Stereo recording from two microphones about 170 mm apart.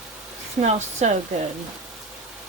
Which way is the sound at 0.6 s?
45° right (ahead or behind).